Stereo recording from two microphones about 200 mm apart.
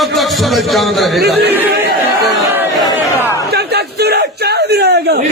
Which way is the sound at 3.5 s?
55° right (ahead or behind).